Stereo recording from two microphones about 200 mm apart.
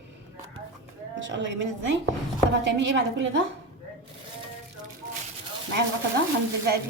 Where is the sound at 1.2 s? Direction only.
65° right (ahead or behind).